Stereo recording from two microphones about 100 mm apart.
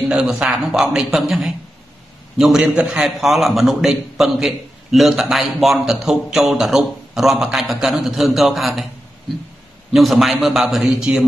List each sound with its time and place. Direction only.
0.1 s a man's voice: 10° right (ahead or behind)
9.8 s a man's voice: centre (ahead or behind)